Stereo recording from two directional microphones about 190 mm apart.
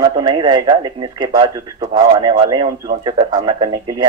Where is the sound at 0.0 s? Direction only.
20° right (ahead or behind).